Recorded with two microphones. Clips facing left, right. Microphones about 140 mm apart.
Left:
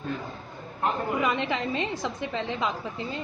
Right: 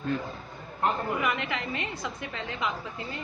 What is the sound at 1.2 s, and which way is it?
A woman's voice, 25° left (ahead or behind).